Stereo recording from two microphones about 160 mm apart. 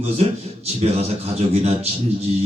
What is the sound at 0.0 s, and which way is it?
Speech, 40° right (ahead or behind).